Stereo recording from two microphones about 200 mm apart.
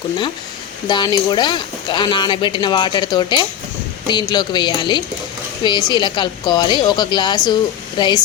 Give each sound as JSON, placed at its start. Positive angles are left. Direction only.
{"t": 0.9, "sound": "a woman's voice", "side_deg": 20}